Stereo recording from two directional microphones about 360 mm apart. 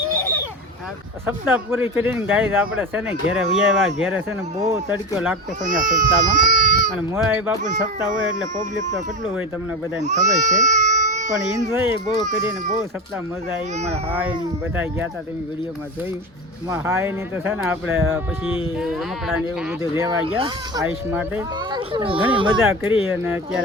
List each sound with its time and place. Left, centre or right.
1.3 s speech: centre
5.6 s speech: right
6.9 s speech: centre
10.0 s speech: centre
11.7 s speech: centre
12.0 s speech: centre
14.1 s speech: centre
16.6 s speech: centre